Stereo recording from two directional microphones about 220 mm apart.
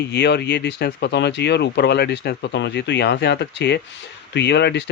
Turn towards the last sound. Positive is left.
turn(degrees=50)  # may be behind; listen again after turning